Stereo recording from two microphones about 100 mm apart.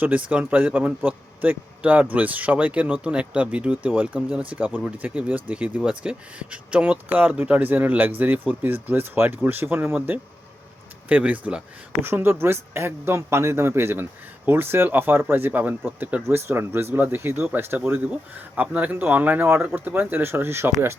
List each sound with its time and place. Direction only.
0.0 s a man's voice: 10° right (ahead or behind)